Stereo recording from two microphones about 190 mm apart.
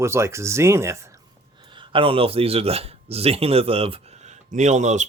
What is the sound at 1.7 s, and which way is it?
Speech, 25° right (ahead or behind).